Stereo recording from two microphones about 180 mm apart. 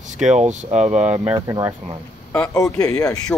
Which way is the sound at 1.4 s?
15° right (ahead or behind).